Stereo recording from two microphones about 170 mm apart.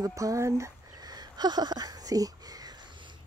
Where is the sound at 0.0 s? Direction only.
20° right (ahead or behind).